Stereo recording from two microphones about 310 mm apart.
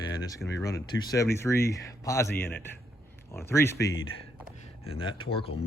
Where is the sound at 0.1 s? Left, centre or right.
Centre.